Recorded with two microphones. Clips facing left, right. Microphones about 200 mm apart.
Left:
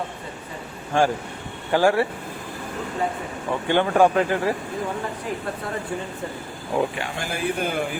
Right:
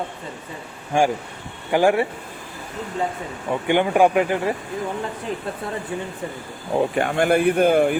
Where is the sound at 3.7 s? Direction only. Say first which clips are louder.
Right 1 dB; 15° right (ahead or behind).